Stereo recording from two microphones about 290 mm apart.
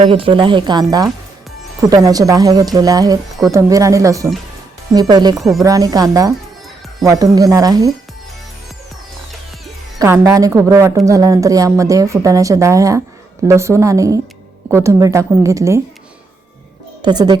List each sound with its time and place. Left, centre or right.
0.0 s a woman's voice: centre
5.4 s speech: centre
5.6 s a woman's voice: centre
10.0 s a woman's voice: centre
17.0 s a woman's voice: centre